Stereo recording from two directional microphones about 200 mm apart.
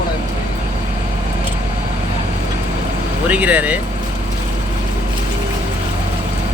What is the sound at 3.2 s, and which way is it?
Speech, 5° right (ahead or behind).